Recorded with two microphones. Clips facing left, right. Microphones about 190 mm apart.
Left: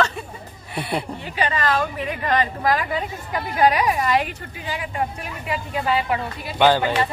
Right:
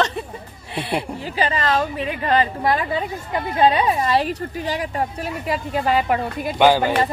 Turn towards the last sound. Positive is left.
turn(degrees=-10)  # may be behind; listen again after turning